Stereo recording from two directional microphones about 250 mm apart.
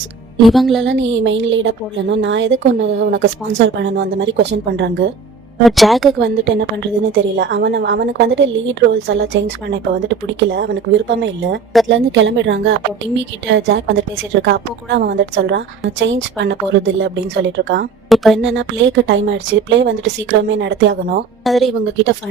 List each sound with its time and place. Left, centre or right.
0.4 s speech: centre
0.9 s a woman's voice: right
5.6 s speech: centre
6.1 s a woman's voice: right
18.1 s speech: centre
18.4 s a woman's voice: right
21.4 s speech: centre